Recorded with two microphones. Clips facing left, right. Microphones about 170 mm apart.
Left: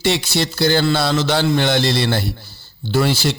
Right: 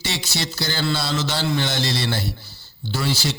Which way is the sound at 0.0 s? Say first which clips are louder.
Left 9 dB; 55° left (ahead or behind).